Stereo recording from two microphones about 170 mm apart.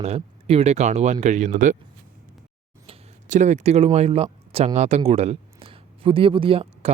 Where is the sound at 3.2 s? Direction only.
45° right (ahead or behind).